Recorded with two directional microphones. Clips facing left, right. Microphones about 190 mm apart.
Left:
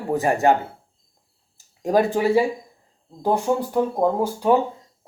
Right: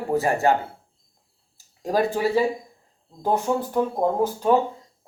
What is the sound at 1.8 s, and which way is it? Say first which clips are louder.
Speech: left 3 dB; 15° left (ahead or behind).